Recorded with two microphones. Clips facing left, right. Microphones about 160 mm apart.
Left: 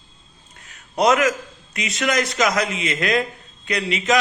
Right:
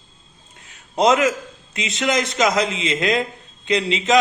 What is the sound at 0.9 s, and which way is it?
A man's voice, 25° right (ahead or behind).